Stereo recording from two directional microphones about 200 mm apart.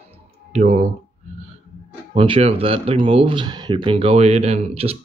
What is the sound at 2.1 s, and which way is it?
Speech, 30° right (ahead or behind).